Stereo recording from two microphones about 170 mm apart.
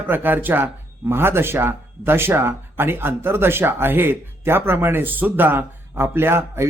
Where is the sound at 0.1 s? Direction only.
10° right (ahead or behind).